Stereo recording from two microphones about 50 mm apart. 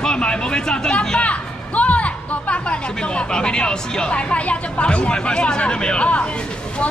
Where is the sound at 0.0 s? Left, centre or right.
Centre.